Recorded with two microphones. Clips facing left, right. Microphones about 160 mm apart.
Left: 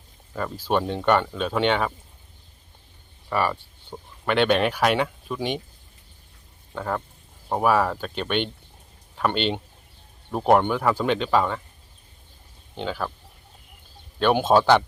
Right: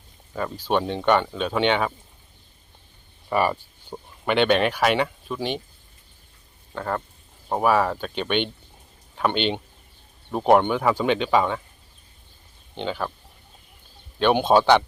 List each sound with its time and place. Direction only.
0.5 s speech: 5° left (ahead or behind)
3.2 s speech: 10° right (ahead or behind)
6.7 s speech: centre (ahead or behind)
12.7 s speech: centre (ahead or behind)
14.2 s speech: 5° left (ahead or behind)